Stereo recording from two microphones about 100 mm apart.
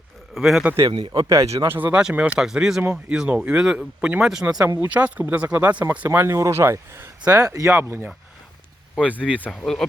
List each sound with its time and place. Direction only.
0.3 s a man's voice: 5° right (ahead or behind)
0.9 s speech: 50° right (ahead or behind)
1.3 s speech: 30° right (ahead or behind); by 6.1 s 15° right (ahead or behind)
6.1 s speech: 25° right (ahead or behind)
9.0 s speech: 10° right (ahead or behind)